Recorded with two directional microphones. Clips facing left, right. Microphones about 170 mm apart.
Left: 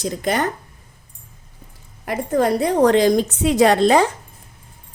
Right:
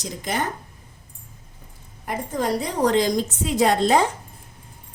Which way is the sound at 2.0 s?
70° left (ahead or behind).